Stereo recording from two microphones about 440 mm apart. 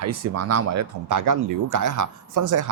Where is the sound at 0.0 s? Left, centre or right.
Right.